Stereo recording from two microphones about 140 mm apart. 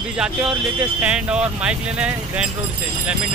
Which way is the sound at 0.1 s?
5° right (ahead or behind).